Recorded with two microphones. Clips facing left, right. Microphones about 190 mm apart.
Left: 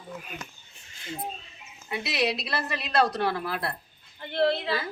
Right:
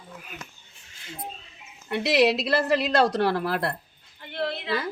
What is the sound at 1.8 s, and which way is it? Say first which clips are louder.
A woman's voice: right 7 dB; 75° right (ahead or behind).